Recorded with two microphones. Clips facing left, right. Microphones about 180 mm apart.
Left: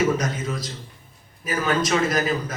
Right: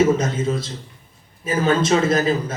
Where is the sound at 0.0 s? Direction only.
25° right (ahead or behind).